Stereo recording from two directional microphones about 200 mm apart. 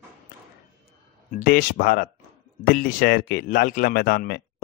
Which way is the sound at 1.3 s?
45° left (ahead or behind).